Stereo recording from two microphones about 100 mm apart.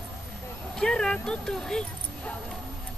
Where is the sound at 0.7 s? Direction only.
5° left (ahead or behind).